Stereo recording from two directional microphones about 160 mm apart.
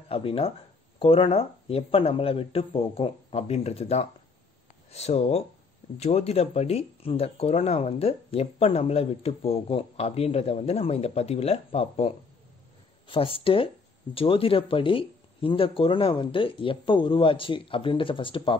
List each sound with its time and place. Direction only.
0.1 s speech: 35° left (ahead or behind)
13.1 s speech: 35° left (ahead or behind)